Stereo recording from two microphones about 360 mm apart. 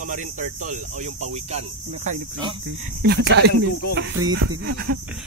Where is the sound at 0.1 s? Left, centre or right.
Right.